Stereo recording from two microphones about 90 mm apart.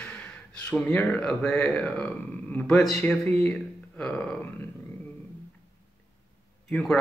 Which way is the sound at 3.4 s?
10° left (ahead or behind).